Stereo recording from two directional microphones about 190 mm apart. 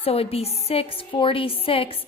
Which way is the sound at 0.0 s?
30° left (ahead or behind).